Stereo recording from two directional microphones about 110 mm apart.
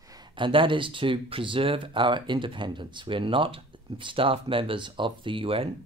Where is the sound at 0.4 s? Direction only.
50° right (ahead or behind).